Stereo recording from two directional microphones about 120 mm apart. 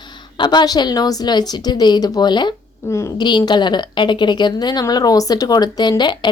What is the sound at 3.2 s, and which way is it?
A woman's voice, 40° left (ahead or behind).